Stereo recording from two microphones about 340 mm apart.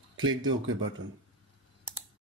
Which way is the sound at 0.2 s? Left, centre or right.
Right.